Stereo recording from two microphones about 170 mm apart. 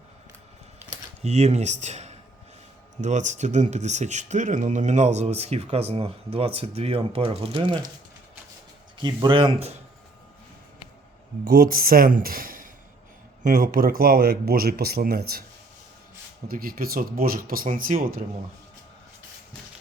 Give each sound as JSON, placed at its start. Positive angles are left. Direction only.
{"t": 0.9, "sound": "typing", "side_deg": -40}
{"t": 3.0, "sound": "speech", "side_deg": -45}
{"t": 9.0, "sound": "speech", "side_deg": -25}
{"t": 11.4, "sound": "speech", "side_deg": -60}
{"t": 16.5, "sound": "speech", "side_deg": -60}